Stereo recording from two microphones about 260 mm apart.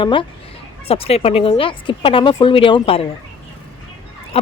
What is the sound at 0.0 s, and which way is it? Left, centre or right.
A man's voice, centre.